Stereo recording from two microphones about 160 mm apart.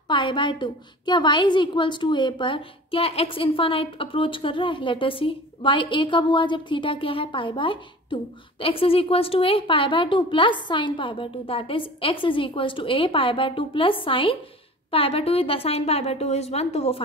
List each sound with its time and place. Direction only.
0.1 s a woman's voice: 30° left (ahead or behind)